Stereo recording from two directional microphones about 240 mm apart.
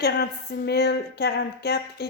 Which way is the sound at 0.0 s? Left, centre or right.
Left.